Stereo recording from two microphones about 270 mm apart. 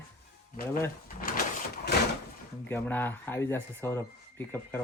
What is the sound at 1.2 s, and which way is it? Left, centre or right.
Sliding door, left.